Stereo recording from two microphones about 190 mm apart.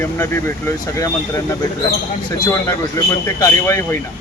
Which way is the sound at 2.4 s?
15° left (ahead or behind).